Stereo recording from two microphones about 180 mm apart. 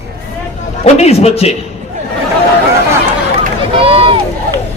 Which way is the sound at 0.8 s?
35° left (ahead or behind).